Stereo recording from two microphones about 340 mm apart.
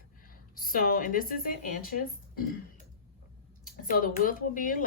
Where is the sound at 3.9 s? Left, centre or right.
Left.